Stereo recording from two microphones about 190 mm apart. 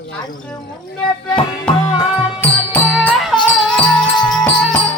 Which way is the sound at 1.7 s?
5° left (ahead or behind).